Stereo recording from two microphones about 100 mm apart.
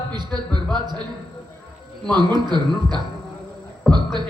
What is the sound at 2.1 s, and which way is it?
Speech, 45° right (ahead or behind).